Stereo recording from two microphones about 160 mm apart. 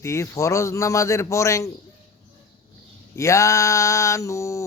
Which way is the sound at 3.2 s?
20° left (ahead or behind).